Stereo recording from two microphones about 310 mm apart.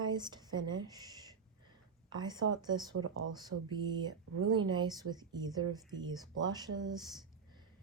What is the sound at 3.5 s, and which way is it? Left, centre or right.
Speech, right.